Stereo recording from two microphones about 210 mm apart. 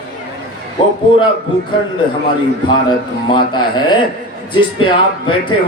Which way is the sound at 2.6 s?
20° left (ahead or behind).